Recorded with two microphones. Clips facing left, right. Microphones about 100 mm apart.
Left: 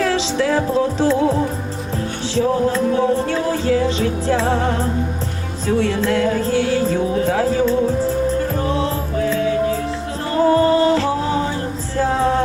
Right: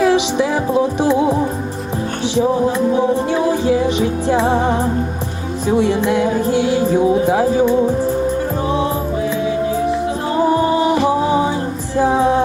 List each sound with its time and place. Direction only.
0.0 s music: 15° right (ahead or behind)